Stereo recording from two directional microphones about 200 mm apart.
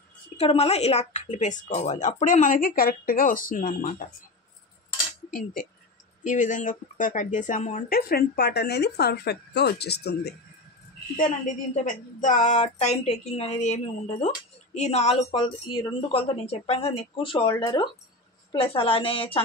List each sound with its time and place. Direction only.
0.4 s speech: 30° left (ahead or behind)
5.3 s speech: 45° left (ahead or behind)
11.1 s a woman's voice: 40° left (ahead or behind)